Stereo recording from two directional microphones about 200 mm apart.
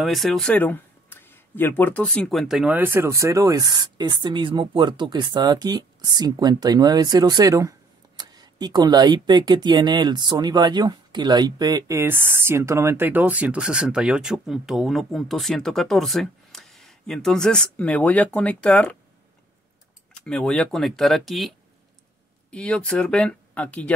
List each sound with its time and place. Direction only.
0.0 s speech: centre (ahead or behind)
20.2 s speech: 5° left (ahead or behind)